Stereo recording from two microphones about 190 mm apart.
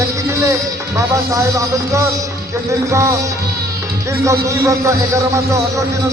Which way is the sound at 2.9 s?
15° right (ahead or behind).